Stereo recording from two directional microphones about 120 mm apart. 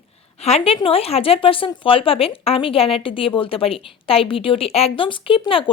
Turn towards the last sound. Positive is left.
turn(degrees=50)  # may be behind; listen again after turning